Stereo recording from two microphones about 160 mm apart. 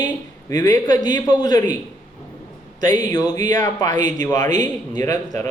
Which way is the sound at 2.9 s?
25° left (ahead or behind).